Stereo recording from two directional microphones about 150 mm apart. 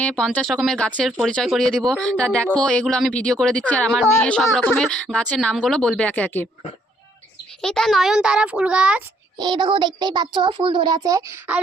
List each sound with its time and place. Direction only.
0.0 s speech: 5° left (ahead or behind)
7.6 s a child's voice: 5° left (ahead or behind)
9.4 s a child's voice: 30° right (ahead or behind)